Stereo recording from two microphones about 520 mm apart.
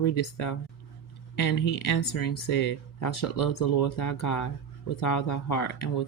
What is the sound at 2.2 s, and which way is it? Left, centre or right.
Speech, left.